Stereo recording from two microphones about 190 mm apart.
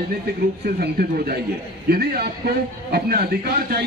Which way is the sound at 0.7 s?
50° right (ahead or behind).